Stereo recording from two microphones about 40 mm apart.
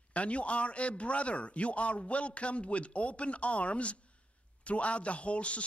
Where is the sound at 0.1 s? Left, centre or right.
Left.